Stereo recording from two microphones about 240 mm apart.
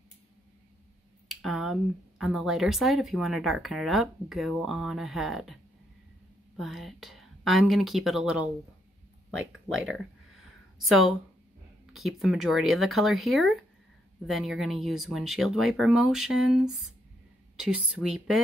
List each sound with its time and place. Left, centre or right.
1.3 s speech: centre
10.8 s speech: centre